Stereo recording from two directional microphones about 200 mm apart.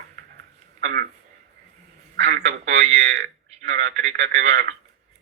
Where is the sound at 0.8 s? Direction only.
50° right (ahead or behind).